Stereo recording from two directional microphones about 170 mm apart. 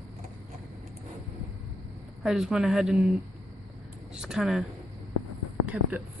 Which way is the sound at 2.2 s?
5° right (ahead or behind).